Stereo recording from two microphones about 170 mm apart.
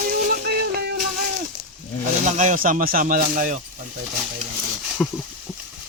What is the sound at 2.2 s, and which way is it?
Speech, 45° right (ahead or behind).